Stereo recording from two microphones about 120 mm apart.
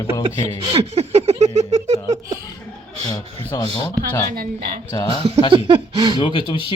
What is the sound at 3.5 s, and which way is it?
Speech, 30° left (ahead or behind).